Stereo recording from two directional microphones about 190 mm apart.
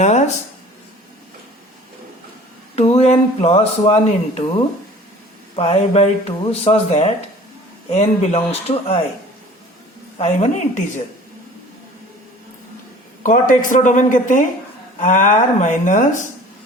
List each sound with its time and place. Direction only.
0.0 s a sound: 40° left (ahead or behind)
2.7 s speech: 35° left (ahead or behind)
5.5 s speech: 35° left (ahead or behind)
10.2 s speech: 35° left (ahead or behind)
13.2 s speech: 45° left (ahead or behind)